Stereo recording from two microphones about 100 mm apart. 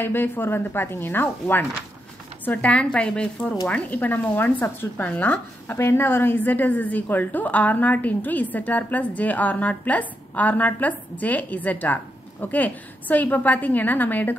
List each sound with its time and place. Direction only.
0.0 s a woman's voice: 20° left (ahead or behind)